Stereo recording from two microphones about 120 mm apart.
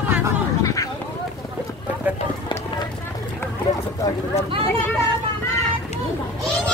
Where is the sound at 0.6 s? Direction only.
25° left (ahead or behind).